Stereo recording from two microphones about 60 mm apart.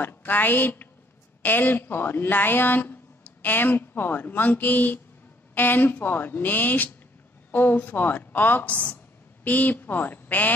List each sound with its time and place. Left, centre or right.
0.0 s a woman's voice: left